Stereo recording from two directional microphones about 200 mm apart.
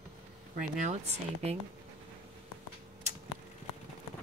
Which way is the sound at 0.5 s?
35° right (ahead or behind).